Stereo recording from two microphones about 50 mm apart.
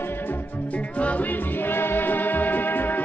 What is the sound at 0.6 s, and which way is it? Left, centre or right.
Music, left.